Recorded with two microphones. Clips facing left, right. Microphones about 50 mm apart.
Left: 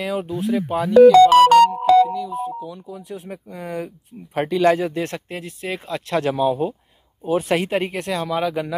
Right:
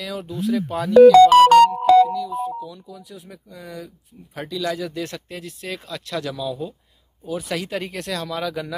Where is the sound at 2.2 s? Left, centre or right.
Left.